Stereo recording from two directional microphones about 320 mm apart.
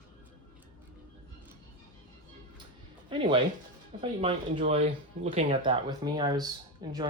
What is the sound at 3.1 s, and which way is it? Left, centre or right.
Speech, centre.